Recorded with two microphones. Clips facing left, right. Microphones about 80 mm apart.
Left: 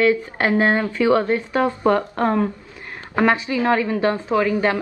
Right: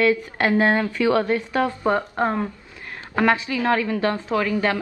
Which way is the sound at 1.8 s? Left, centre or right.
Centre.